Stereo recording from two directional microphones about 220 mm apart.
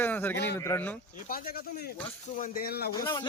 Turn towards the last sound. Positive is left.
turn(degrees=20)  # may be behind; listen again after turning